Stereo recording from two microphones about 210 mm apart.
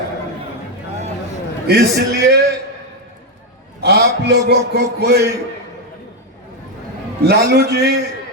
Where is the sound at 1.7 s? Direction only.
50° right (ahead or behind).